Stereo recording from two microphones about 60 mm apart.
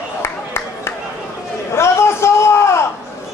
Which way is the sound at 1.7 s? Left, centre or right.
Left.